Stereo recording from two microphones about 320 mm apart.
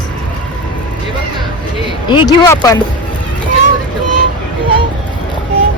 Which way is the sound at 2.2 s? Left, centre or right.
Centre.